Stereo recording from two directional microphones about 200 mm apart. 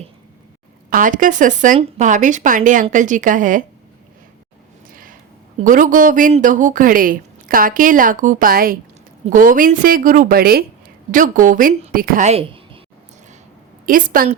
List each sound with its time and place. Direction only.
0.9 s speech: 40° right (ahead or behind)
5.6 s a woman's voice: 40° right (ahead or behind)
13.8 s speech: 45° right (ahead or behind)